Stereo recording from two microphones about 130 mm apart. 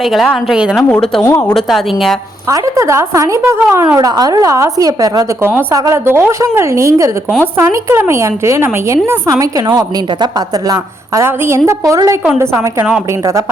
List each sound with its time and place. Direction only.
0.0 s speech: centre (ahead or behind)
1.2 s speech: 20° left (ahead or behind)
1.5 s speech: centre (ahead or behind)
2.5 s a woman's voice: 25° right (ahead or behind)